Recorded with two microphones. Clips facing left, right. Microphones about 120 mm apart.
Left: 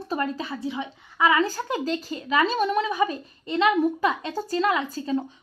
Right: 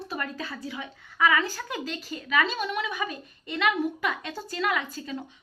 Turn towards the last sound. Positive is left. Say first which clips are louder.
# left 6 dB
turn(degrees=35)  # may be behind; listen again after turning